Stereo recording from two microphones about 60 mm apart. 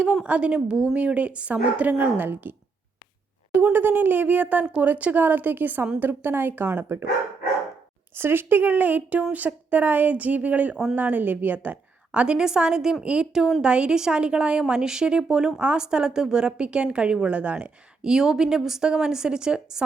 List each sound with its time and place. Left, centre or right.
0.0 s speech: centre; by 7.0 s right
8.1 s a woman's voice: right
18.0 s a woman's voice: centre